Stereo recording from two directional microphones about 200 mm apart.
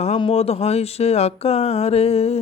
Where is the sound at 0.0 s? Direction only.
30° left (ahead or behind).